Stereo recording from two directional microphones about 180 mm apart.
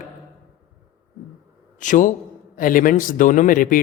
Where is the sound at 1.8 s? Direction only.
45° left (ahead or behind).